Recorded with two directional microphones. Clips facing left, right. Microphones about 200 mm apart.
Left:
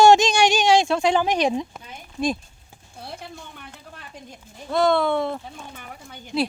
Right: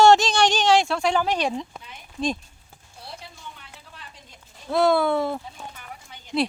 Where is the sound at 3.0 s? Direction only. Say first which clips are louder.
Left 4 dB; 55° left (ahead or behind).